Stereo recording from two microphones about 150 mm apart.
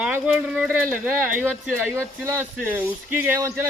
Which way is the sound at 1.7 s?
5° left (ahead or behind).